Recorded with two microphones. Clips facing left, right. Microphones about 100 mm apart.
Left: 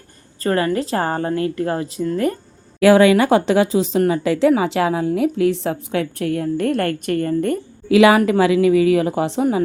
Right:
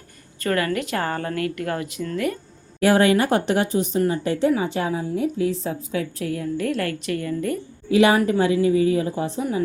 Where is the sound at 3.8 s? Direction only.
90° left; by 7.6 s 50° left (ahead or behind).